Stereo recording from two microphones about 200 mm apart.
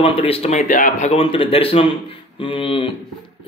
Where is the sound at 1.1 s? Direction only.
25° left (ahead or behind).